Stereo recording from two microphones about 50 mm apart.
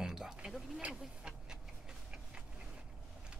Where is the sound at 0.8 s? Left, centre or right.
Centre.